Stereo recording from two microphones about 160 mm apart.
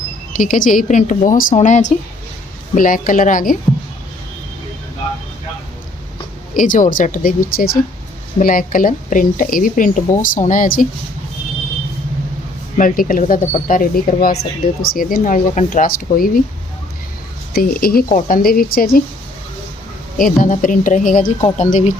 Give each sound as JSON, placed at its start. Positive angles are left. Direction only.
{"t": 0.3, "sound": "speech", "side_deg": 55}
{"t": 2.7, "sound": "speech", "side_deg": 60}
{"t": 6.6, "sound": "speech", "side_deg": 55}
{"t": 12.7, "sound": "speech", "side_deg": 60}
{"t": 17.5, "sound": "speech", "side_deg": 70}
{"t": 20.1, "sound": "speech", "side_deg": 60}